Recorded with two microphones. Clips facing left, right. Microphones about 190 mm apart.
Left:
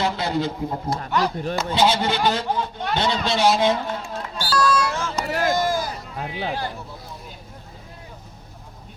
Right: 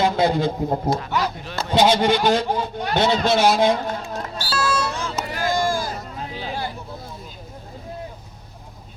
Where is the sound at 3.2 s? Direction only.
50° right (ahead or behind).